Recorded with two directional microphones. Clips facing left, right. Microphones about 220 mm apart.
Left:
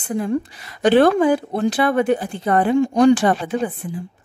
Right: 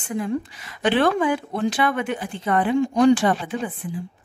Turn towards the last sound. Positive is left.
turn(degrees=40)  # may be behind; listen again after turning